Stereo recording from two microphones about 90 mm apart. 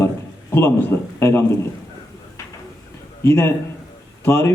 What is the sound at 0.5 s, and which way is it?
Speech, 30° left (ahead or behind).